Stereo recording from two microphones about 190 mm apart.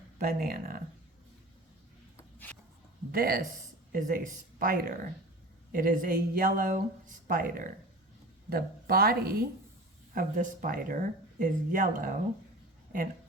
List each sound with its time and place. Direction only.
0.2 s speech: 50° right (ahead or behind)
3.1 s speech: 50° right (ahead or behind)